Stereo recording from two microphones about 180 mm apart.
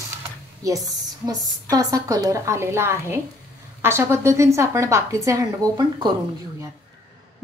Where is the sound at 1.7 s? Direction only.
20° right (ahead or behind).